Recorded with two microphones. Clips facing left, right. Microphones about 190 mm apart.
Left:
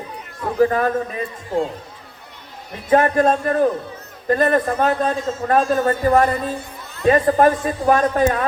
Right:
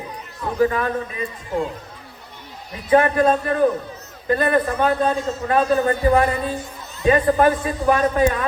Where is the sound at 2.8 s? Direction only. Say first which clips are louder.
Even; 45° left (ahead or behind).